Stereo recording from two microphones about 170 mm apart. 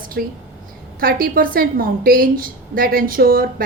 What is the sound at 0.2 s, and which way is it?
A woman's voice, 65° right (ahead or behind).